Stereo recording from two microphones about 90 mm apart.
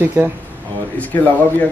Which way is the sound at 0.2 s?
25° right (ahead or behind).